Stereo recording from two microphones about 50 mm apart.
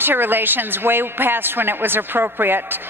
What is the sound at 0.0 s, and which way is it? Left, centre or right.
A woman's voice, right.